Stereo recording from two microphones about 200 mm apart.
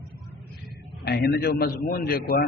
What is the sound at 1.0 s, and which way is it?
A man's voice, 50° left (ahead or behind).